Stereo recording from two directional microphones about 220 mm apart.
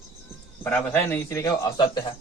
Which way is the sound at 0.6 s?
10° left (ahead or behind).